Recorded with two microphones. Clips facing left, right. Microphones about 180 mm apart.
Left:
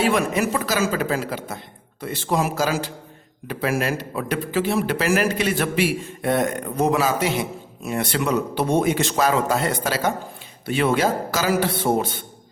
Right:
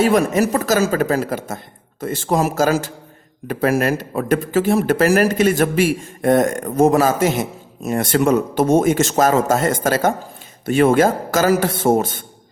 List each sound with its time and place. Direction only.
0.0 s speech: 40° right (ahead or behind)